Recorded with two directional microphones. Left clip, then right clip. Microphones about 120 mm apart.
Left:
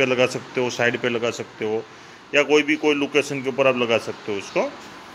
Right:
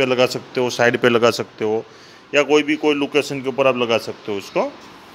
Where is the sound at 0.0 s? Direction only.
35° right (ahead or behind).